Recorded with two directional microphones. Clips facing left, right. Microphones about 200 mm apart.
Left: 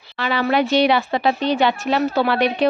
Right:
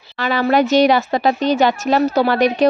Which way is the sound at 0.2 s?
45° right (ahead or behind).